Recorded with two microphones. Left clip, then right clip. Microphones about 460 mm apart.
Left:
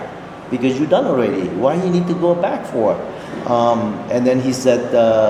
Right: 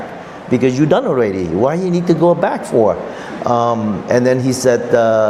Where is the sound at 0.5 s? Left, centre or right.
Right.